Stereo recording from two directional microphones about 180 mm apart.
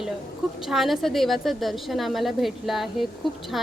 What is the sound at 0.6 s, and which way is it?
Speech, centre (ahead or behind).